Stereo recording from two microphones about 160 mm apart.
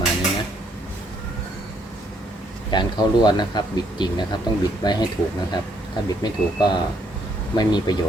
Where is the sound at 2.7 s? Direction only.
25° left (ahead or behind).